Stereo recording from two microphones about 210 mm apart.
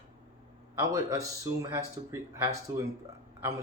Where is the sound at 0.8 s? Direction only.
15° right (ahead or behind).